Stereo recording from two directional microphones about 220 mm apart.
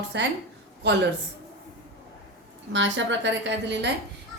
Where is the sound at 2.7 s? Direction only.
55° right (ahead or behind).